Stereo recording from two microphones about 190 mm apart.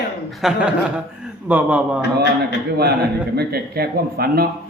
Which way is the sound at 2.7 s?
55° right (ahead or behind).